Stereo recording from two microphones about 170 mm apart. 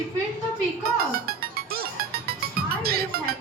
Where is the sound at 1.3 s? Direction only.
65° right (ahead or behind).